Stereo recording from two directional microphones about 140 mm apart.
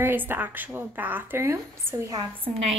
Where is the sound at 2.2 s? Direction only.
40° right (ahead or behind).